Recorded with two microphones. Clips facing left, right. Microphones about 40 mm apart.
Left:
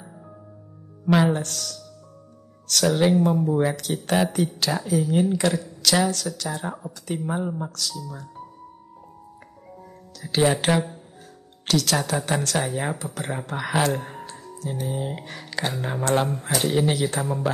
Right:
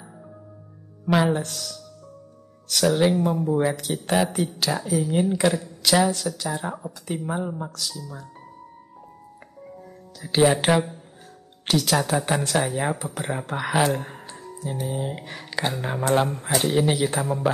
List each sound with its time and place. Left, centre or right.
1.0 s speech: centre
10.1 s speech: centre
12.9 s speech: centre
13.2 s speech: centre
14.2 s speech: centre